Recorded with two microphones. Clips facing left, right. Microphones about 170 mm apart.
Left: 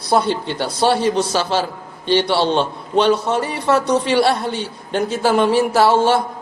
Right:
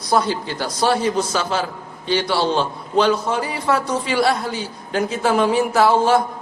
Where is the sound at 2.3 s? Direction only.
25° left (ahead or behind).